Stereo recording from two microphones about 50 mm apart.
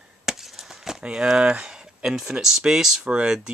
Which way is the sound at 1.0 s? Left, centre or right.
Centre.